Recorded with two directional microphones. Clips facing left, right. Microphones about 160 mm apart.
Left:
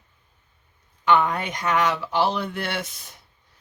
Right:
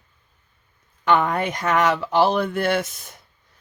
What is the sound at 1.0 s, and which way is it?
Speech, 50° right (ahead or behind).